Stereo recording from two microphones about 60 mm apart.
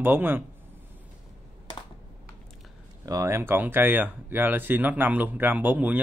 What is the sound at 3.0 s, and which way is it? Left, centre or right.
Speech, right.